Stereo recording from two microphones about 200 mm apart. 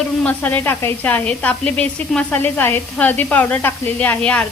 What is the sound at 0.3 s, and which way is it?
Speech, 10° left (ahead or behind).